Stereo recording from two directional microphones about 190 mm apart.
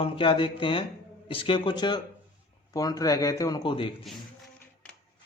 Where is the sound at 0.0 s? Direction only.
30° left (ahead or behind).